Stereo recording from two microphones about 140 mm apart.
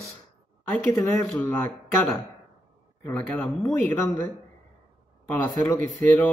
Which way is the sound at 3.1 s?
15° left (ahead or behind).